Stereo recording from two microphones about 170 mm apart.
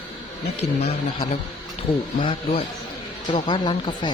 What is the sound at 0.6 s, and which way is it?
Speech, 40° left (ahead or behind).